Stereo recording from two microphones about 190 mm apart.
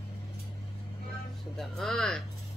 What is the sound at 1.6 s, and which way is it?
Speech, centre (ahead or behind).